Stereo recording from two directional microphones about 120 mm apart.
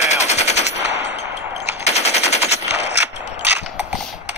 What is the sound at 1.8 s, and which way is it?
Machine gun, 65° left (ahead or behind).